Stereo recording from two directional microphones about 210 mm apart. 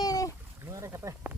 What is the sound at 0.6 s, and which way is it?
Rowboat, 15° right (ahead or behind).